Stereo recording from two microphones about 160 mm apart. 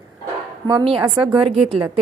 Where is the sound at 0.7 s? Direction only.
30° right (ahead or behind).